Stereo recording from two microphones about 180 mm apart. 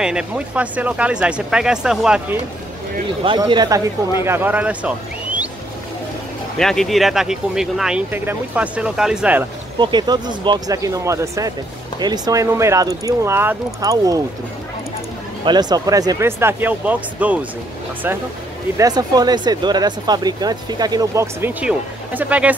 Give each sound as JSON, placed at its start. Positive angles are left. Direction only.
{"t": 0.0, "sound": "speech", "side_deg": -5}
{"t": 3.3, "sound": "speech", "side_deg": -25}
{"t": 6.6, "sound": "speech", "side_deg": 0}
{"t": 9.8, "sound": "speech", "side_deg": -25}
{"t": 15.4, "sound": "speech", "side_deg": -20}
{"t": 18.8, "sound": "speech", "side_deg": -20}